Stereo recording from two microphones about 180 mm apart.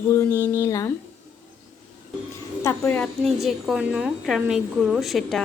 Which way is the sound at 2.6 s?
10° left (ahead or behind).